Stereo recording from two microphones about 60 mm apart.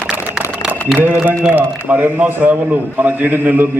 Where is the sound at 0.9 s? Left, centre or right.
Right.